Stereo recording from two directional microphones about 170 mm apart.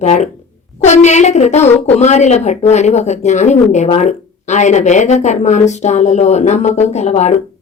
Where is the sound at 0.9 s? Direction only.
45° left (ahead or behind).